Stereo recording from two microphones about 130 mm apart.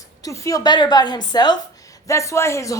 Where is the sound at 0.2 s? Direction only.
25° left (ahead or behind).